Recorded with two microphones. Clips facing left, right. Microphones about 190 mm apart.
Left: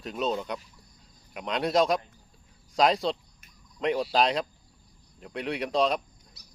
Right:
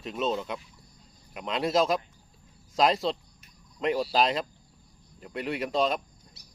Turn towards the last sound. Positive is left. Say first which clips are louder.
# right 1 dB
turn(degrees=-30)  # may be behind; listen again after turning